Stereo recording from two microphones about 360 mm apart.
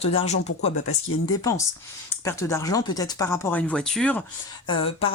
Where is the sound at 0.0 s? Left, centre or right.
Centre.